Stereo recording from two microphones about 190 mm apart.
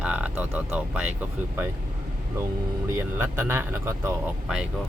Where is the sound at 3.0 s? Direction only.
15° right (ahead or behind).